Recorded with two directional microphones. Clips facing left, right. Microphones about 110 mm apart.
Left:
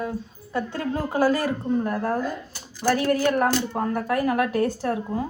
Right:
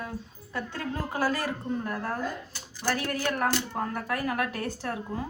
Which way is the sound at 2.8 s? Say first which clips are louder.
Left 8 dB; 45° left (ahead or behind).